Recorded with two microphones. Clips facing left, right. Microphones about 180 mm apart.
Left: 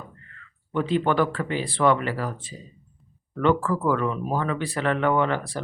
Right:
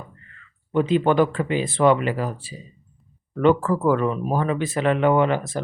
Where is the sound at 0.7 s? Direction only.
20° right (ahead or behind).